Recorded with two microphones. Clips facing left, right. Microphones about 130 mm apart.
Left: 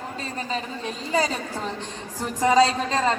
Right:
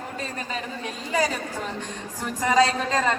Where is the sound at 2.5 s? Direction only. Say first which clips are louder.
Left 1 dB; 30° left (ahead or behind).